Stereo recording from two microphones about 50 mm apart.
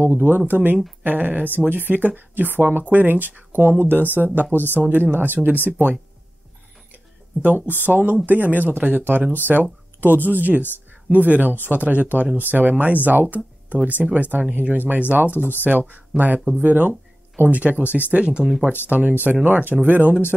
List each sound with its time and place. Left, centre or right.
0.0 s speech: right
7.6 s speech: left
7.9 s speech: right
15.7 s speech: centre
16.1 s speech: centre
16.4 s speech: right
18.1 s speech: right
18.9 s speech: right